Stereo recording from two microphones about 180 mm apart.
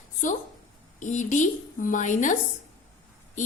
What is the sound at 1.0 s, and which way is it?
A woman's voice, 45° left (ahead or behind).